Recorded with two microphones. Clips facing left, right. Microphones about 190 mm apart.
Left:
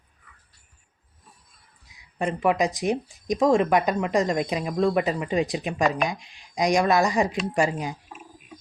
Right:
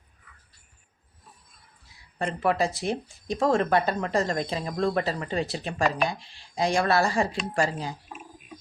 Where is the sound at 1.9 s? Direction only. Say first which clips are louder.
Left 3 dB; 15° left (ahead or behind).